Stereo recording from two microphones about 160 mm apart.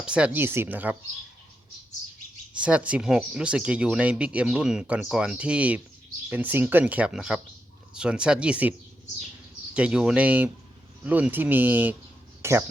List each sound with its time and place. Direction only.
0.0 s speech: 5° right (ahead or behind)
2.6 s speech: 5° right (ahead or behind)
9.7 s speech: 5° right (ahead or behind)
12.4 s a sound: 15° right (ahead or behind)